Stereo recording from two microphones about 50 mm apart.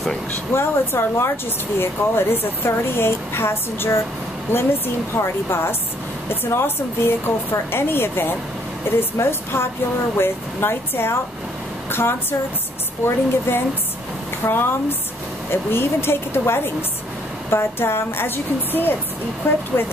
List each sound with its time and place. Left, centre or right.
0.6 s speech: left
13.5 s speech: left